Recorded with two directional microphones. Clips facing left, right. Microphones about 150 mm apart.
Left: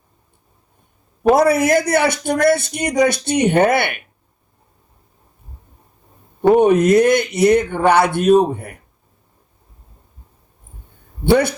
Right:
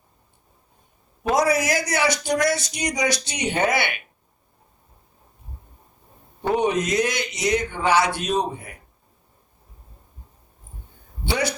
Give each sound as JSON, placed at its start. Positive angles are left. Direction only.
{"t": 1.2, "sound": "a man's voice", "side_deg": 55}
{"t": 6.4, "sound": "a man's voice", "side_deg": 55}
{"t": 11.2, "sound": "a man's voice", "side_deg": 55}